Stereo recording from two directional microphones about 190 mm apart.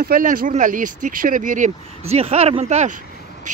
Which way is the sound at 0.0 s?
45° right (ahead or behind).